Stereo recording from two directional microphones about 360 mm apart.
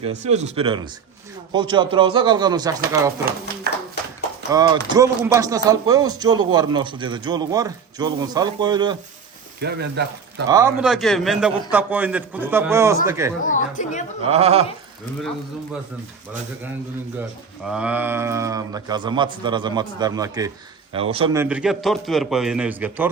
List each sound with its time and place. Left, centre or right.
0.0 s speech: centre
4.5 s speech: centre
9.6 s speech: right
10.5 s a man's voice: centre
13.4 s a woman's voice: left
14.3 s speech: centre
17.2 s a man's voice: centre